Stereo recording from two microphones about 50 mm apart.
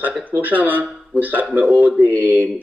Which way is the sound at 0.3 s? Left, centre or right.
Right.